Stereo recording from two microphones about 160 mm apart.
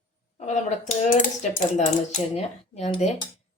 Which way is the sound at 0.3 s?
45° left (ahead or behind).